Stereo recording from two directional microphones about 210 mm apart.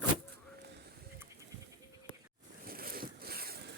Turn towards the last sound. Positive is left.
turn(degrees=-45)  # may be behind; listen again after turning